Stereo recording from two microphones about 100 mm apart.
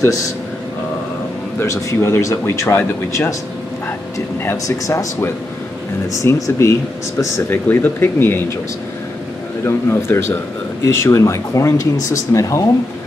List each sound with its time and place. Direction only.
1.6 s speech: 30° left (ahead or behind)
4.5 s speech: 30° left (ahead or behind)
9.7 s speech: 25° left (ahead or behind)